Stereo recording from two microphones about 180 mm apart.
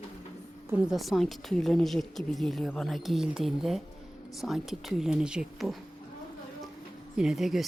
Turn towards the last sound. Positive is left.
turn(degrees=0)  # may be behind; listen again after turning